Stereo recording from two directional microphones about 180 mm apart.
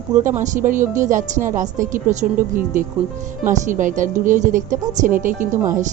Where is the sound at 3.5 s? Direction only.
45° right (ahead or behind).